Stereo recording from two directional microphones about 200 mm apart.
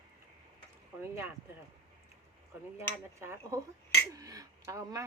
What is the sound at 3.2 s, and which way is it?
Speech, 10° right (ahead or behind).